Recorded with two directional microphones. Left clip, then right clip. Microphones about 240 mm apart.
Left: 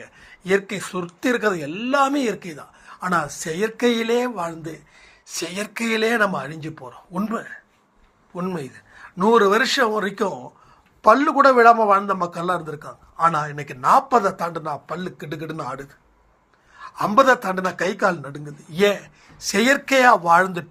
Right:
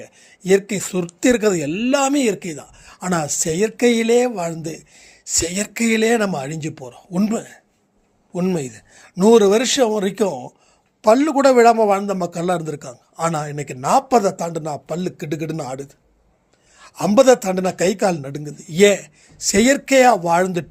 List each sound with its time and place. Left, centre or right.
0.0 s speech: right